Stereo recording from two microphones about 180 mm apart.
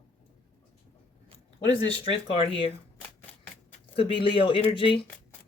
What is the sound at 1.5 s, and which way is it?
Speech, 30° left (ahead or behind).